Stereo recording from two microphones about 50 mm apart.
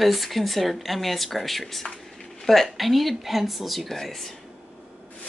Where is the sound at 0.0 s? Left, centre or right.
Centre.